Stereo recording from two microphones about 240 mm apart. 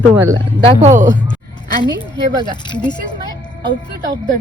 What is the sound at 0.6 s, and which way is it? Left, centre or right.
Speech, right.